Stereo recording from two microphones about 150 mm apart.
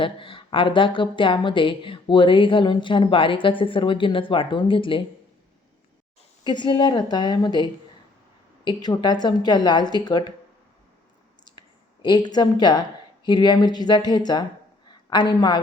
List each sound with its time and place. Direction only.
0.0 s speech: 35° left (ahead or behind)
6.4 s a woman's voice: 30° left (ahead or behind)
12.0 s a woman's voice: 30° left (ahead or behind)